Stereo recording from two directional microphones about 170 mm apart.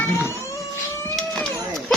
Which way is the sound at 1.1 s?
Centre (ahead or behind).